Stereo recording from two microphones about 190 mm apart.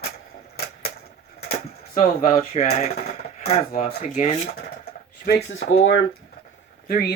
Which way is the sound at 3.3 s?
35° left (ahead or behind).